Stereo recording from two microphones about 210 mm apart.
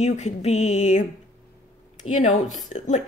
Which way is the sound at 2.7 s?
35° left (ahead or behind).